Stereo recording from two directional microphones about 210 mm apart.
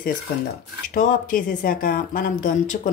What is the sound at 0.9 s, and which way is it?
Speech, 40° left (ahead or behind).